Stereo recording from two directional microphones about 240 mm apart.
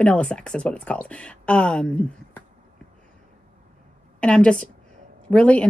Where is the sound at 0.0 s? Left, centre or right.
Centre.